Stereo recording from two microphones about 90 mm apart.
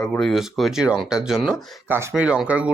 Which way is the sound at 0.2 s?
5° left (ahead or behind).